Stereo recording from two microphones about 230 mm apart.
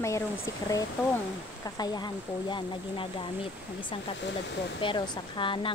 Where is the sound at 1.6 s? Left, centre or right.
Centre.